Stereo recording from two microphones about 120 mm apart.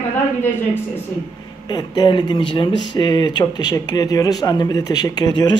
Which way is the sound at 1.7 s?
35° left (ahead or behind).